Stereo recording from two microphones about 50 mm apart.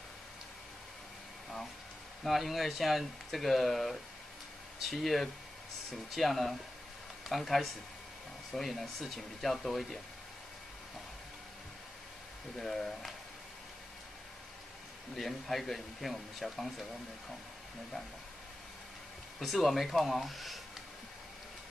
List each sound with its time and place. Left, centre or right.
2.2 s speech: centre
12.5 s speech: centre
15.1 s speech: centre
19.4 s speech: centre